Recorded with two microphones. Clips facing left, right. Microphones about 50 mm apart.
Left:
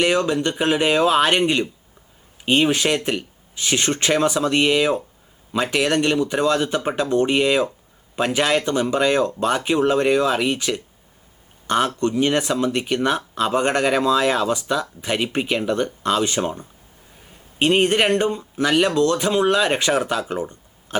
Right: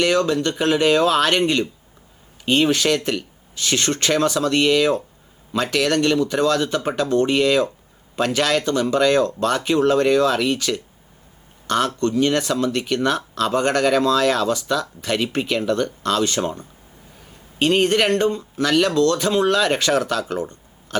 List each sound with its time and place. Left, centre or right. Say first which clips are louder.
0.0 s speech: right 1 dB; centre